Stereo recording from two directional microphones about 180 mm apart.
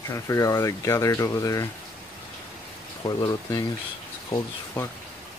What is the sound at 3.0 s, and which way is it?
Speech, 20° left (ahead or behind).